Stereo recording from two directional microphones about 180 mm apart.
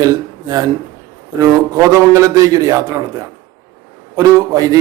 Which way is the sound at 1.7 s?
15° right (ahead or behind).